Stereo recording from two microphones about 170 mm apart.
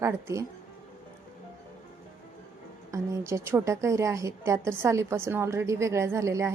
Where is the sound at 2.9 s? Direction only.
15° right (ahead or behind).